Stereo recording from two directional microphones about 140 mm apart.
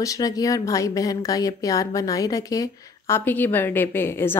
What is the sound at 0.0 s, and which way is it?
A woman's voice, 25° left (ahead or behind).